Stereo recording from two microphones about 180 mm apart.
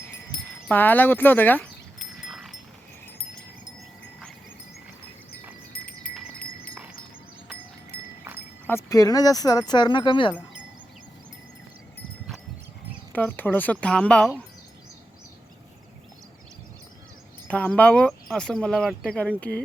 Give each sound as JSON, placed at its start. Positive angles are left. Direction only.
{"t": 0.7, "sound": "speech", "side_deg": 10}
{"t": 2.0, "sound": "a sound", "side_deg": 0}
{"t": 5.7, "sound": "wind chime", "side_deg": 55}
{"t": 7.9, "sound": "a sound", "side_deg": 55}
{"t": 8.6, "sound": "speech", "side_deg": 15}
{"t": 13.1, "sound": "speech", "side_deg": 10}
{"t": 17.5, "sound": "speech", "side_deg": 5}